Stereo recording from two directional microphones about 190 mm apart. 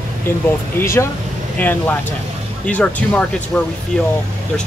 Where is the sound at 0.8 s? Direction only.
15° left (ahead or behind).